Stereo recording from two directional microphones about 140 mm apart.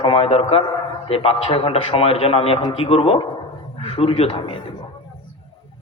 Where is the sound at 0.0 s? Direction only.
45° left (ahead or behind).